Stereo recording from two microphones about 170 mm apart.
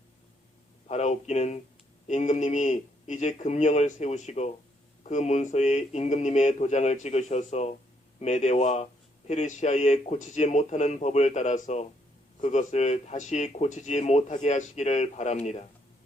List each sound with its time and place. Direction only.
0.9 s speech: 40° left (ahead or behind)